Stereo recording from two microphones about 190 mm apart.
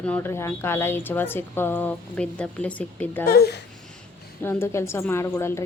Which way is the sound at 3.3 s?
55° left (ahead or behind).